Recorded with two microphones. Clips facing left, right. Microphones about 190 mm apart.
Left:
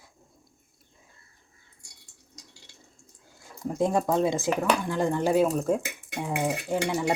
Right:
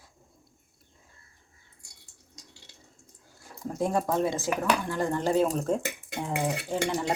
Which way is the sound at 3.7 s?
15° left (ahead or behind).